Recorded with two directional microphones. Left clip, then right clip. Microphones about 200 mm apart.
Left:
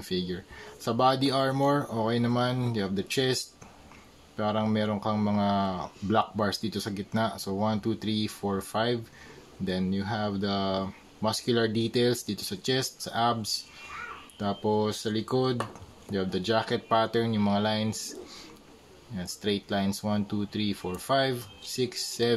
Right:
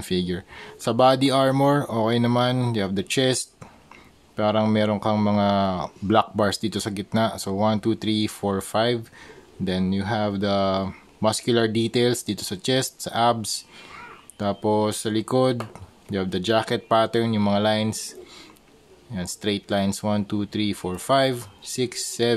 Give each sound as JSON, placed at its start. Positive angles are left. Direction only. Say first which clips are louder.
{"t": 0.0, "sound": "speech", "louder": "right 6 dB", "side_deg": -45}
{"t": 19.1, "sound": "speech", "louder": "right 4 dB", "side_deg": -40}